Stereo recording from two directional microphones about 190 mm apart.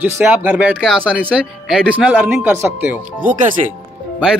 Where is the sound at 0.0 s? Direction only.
10° right (ahead or behind).